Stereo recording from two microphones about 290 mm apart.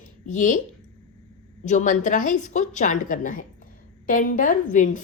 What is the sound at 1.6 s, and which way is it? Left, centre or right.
A woman's voice, left.